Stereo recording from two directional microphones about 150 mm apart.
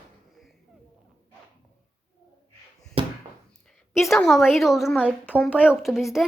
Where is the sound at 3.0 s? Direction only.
40° right (ahead or behind).